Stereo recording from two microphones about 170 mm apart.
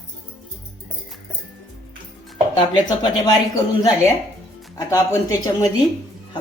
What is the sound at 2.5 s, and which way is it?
Speech, 30° left (ahead or behind).